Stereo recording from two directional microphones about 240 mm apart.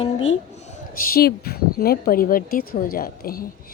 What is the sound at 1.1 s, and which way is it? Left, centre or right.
Speech, left.